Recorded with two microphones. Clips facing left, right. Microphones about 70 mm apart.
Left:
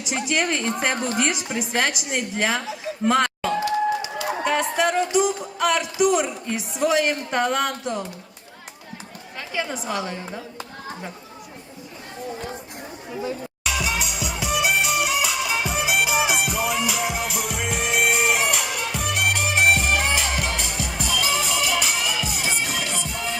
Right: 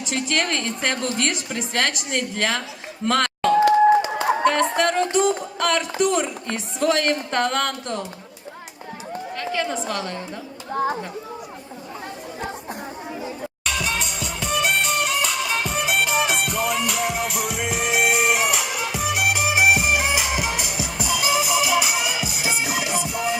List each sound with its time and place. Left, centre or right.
0.0 s a woman's voice: centre
3.1 s a sound: centre
3.7 s a sound: right
4.4 s music: centre
5.5 s a woman's voice: centre
9.4 s a woman's voice: centre
13.7 s music: centre